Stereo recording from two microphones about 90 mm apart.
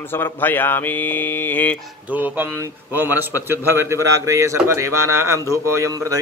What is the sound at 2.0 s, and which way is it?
A man's voice, 20° right (ahead or behind).